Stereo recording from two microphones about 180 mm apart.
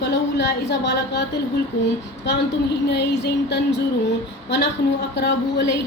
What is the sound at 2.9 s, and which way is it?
Speech, 70° left (ahead or behind).